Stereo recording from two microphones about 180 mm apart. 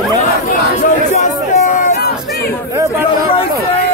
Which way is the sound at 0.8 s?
45° left (ahead or behind).